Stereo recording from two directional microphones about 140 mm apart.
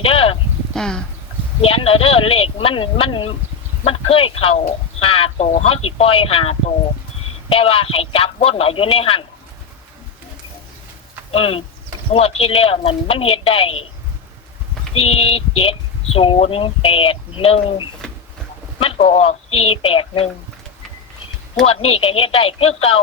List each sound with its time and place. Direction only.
0.0 s a sound: 40° left (ahead or behind)
0.7 s speech: 5° left (ahead or behind)
1.6 s a woman's voice: 45° left (ahead or behind)
11.3 s a woman's voice: 40° left (ahead or behind)
14.9 s a woman's voice: 45° left (ahead or behind)
19.0 s speech: 45° left (ahead or behind)
21.6 s speech: 45° left (ahead or behind)